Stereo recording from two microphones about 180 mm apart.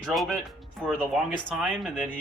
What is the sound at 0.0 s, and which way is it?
Speech, centre (ahead or behind).